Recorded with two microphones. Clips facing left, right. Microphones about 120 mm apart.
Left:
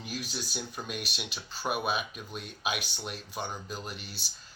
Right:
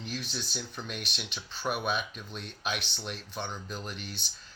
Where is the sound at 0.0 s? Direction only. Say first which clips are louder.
Even; 5° left (ahead or behind).